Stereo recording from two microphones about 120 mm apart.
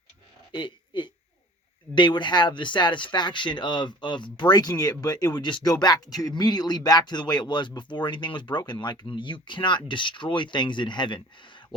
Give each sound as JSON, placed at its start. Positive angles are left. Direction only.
{"t": 0.5, "sound": "speech", "side_deg": 40}